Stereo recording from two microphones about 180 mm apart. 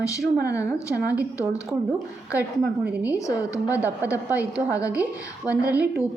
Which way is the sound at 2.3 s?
10° right (ahead or behind).